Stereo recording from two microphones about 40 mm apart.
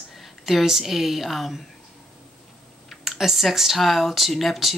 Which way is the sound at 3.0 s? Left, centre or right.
Centre.